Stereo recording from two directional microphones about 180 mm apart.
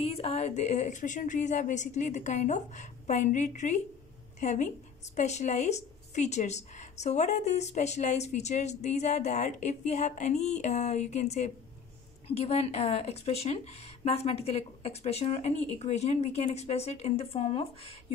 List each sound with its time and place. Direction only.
0.0 s a woman's voice: 35° left (ahead or behind)